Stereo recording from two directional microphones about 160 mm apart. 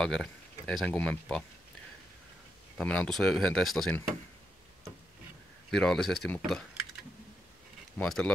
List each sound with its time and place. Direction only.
0.0 s speech: 5° left (ahead or behind)
2.8 s speech: 5° left (ahead or behind)
5.7 s speech: 5° left (ahead or behind)
8.0 s speech: 5° left (ahead or behind)